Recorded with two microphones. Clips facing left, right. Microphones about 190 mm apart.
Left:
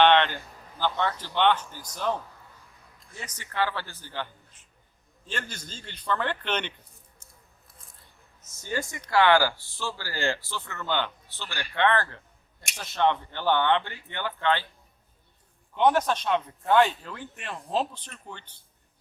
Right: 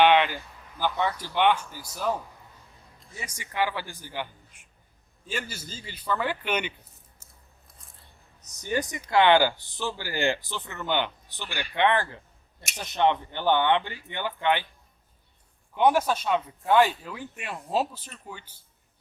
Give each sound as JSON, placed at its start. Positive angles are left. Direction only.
{"t": 0.0, "sound": "a sound", "side_deg": -10}
{"t": 0.8, "sound": "speech", "side_deg": -10}
{"t": 7.2, "sound": "biting", "side_deg": -5}
{"t": 8.4, "sound": "speech", "side_deg": -15}
{"t": 15.7, "sound": "speech", "side_deg": -10}